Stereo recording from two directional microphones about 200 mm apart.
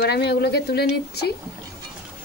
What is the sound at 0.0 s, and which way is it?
Speech, 55° left (ahead or behind).